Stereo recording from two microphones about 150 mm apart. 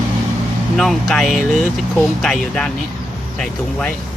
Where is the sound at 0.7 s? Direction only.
Centre (ahead or behind).